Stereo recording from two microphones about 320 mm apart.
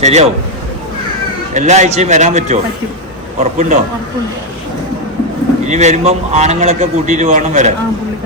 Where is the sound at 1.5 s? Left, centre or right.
Right.